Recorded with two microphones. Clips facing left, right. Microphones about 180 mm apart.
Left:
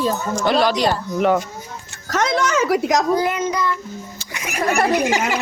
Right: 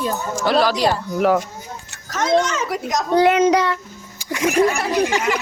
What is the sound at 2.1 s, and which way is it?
Speech, 75° left (ahead or behind).